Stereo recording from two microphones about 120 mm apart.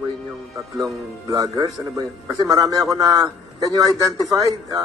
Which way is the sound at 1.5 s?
30° right (ahead or behind).